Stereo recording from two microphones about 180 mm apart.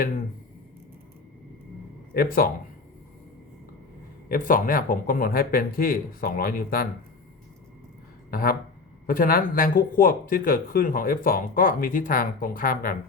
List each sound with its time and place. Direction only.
2.1 s speech: 55° left (ahead or behind)
4.3 s speech: 50° left (ahead or behind)
8.3 s speech: 55° left (ahead or behind)